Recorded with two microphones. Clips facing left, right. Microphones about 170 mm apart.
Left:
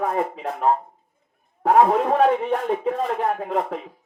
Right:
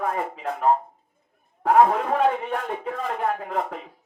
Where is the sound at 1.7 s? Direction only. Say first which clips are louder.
Left 2 dB; 35° left (ahead or behind).